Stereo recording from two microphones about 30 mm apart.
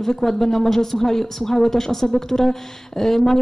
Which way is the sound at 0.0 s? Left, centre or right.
Centre.